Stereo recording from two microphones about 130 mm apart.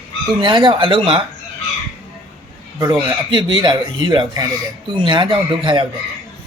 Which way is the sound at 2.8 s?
30° right (ahead or behind).